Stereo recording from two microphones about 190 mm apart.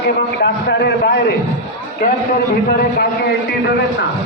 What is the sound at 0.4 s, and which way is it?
Speech, 60° left (ahead or behind).